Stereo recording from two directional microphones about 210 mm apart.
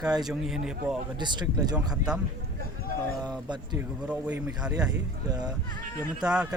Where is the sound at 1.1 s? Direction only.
20° right (ahead or behind).